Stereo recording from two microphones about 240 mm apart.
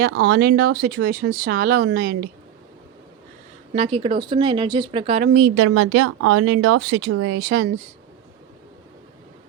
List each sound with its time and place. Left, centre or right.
0.0 s speech: right
3.7 s speech: right
5.5 s speech: right